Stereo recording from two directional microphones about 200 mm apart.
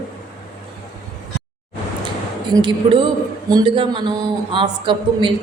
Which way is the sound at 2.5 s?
25° right (ahead or behind).